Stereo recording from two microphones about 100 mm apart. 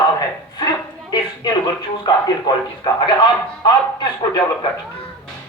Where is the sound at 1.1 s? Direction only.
45° left (ahead or behind).